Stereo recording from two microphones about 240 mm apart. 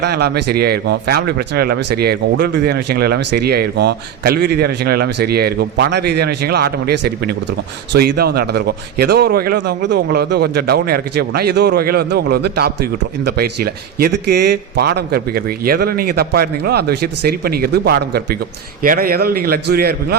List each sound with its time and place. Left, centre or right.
0.0 s speech: right